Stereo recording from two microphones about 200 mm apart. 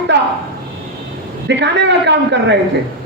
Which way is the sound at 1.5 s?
60° right (ahead or behind).